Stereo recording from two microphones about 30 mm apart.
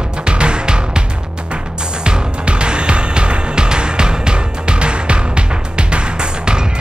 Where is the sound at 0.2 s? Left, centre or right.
Right.